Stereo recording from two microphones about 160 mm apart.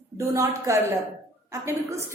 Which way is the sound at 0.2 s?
20° right (ahead or behind).